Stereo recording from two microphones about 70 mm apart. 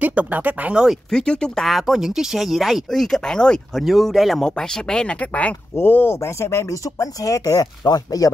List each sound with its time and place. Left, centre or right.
0.0 s speech: right
1.1 s speech: centre
3.8 s speech: centre
5.2 s speech: left
6.1 s speech: left